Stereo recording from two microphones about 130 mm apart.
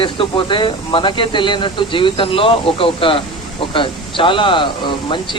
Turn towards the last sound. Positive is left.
turn(degrees=40)  # may be behind; listen again after turning